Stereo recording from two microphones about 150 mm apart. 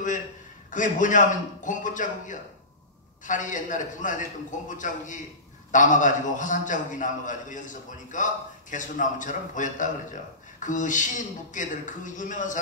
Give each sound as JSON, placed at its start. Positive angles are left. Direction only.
{"t": 0.7, "sound": "a man's voice", "side_deg": 60}